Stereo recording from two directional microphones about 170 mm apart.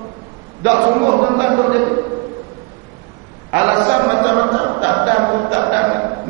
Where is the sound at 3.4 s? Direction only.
25° right (ahead or behind).